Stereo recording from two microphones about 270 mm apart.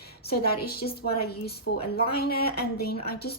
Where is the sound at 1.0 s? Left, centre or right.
Left.